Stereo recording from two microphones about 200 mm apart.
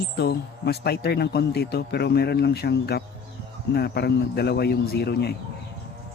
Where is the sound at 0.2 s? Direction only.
55° left (ahead or behind).